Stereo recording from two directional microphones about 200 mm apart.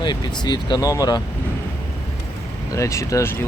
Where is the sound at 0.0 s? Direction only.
20° left (ahead or behind).